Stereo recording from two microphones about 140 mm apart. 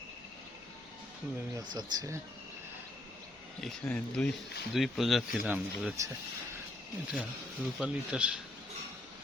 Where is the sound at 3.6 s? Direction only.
5° left (ahead or behind).